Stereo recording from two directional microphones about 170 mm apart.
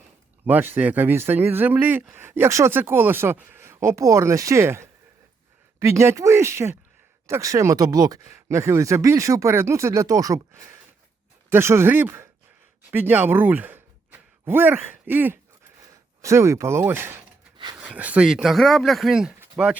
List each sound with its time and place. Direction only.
0.4 s speech: 10° right (ahead or behind)